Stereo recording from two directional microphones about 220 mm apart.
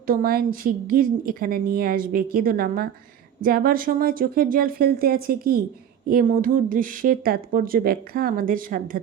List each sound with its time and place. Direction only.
0.1 s a woman's voice: 40° right (ahead or behind)